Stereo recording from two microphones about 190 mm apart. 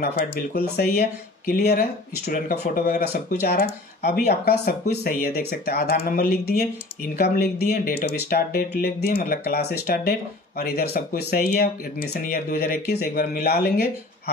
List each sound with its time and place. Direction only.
0.0 s speech: 55° left (ahead or behind)